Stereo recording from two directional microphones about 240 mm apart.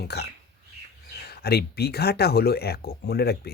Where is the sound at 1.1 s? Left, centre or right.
Left.